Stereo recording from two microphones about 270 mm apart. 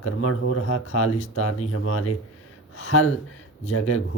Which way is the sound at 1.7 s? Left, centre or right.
Left.